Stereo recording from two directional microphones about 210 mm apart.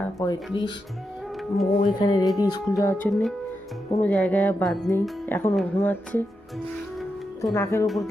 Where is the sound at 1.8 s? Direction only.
20° left (ahead or behind).